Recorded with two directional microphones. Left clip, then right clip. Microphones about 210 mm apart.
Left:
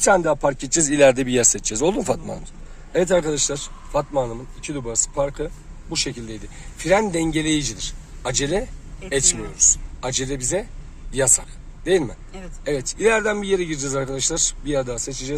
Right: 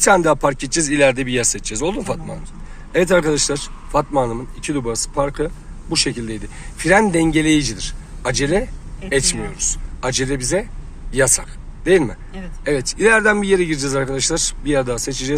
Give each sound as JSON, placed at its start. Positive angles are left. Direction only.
{"t": 0.0, "sound": "speech", "side_deg": 10}
{"t": 0.7, "sound": "speech", "side_deg": 25}
{"t": 2.9, "sound": "a man's voice", "side_deg": 20}
{"t": 3.2, "sound": "a man's voice", "side_deg": 0}